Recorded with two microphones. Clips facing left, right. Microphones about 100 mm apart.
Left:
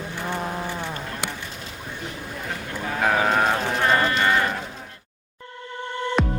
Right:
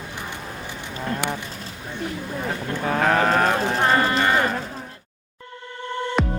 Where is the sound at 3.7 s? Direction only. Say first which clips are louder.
Right 1 dB; 30° right (ahead or behind).